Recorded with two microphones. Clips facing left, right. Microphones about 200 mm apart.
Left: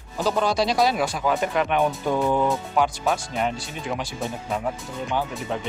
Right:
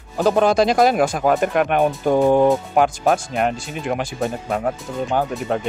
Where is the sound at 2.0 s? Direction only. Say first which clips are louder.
Right 7 dB; 40° right (ahead or behind).